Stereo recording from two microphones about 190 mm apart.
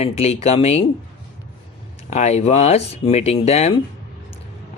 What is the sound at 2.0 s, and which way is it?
Speech, 35° left (ahead or behind).